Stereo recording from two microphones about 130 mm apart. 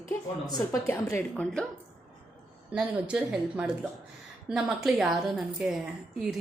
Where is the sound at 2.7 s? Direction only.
5° right (ahead or behind).